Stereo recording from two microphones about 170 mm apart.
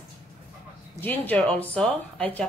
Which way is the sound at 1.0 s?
10° left (ahead or behind).